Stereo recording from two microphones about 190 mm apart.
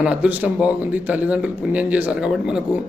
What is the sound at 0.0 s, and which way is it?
A man's voice, 5° right (ahead or behind).